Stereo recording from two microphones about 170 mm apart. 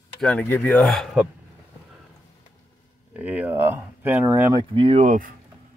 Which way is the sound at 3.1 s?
10° right (ahead or behind).